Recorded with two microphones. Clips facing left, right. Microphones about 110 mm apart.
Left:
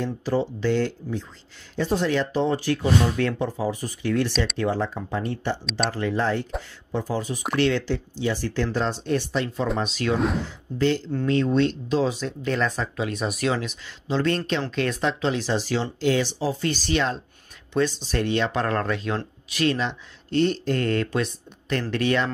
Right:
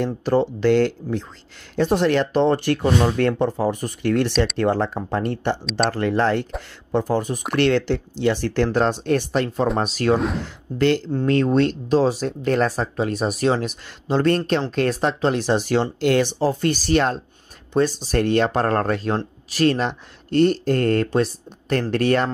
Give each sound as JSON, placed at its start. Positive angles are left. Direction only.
{"t": 0.0, "sound": "speech", "side_deg": -60}
{"t": 10.1, "sound": "speech", "side_deg": 0}
{"t": 11.2, "sound": "speech", "side_deg": -50}
{"t": 12.6, "sound": "speech", "side_deg": -35}
{"t": 13.7, "sound": "speech", "side_deg": -50}